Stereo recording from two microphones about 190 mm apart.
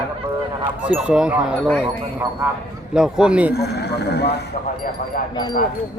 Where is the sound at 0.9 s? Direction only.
5° right (ahead or behind).